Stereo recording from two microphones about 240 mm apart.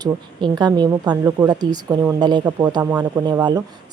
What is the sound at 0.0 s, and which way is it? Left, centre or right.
Speech, centre.